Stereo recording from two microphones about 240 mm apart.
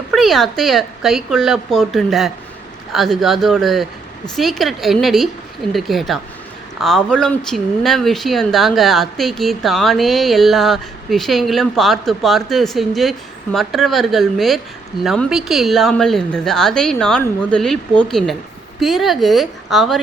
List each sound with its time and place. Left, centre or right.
0.1 s speech: centre